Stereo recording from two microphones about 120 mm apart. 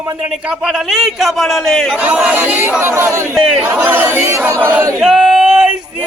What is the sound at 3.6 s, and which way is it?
Speech, 20° right (ahead or behind).